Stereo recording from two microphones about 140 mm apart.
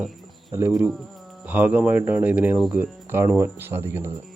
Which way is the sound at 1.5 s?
10° right (ahead or behind).